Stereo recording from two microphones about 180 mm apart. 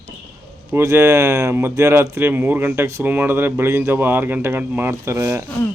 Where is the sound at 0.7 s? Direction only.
15° right (ahead or behind).